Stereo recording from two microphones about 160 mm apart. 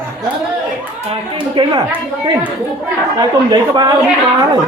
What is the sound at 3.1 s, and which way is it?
Speech, 25° right (ahead or behind).